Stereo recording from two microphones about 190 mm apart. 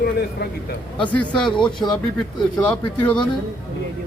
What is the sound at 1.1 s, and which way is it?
Speech, 5° left (ahead or behind).